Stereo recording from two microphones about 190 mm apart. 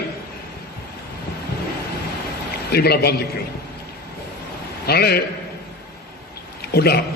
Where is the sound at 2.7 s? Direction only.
55° left (ahead or behind).